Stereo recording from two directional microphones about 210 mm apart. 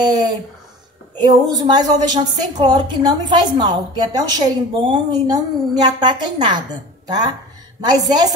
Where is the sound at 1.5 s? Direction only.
20° right (ahead or behind).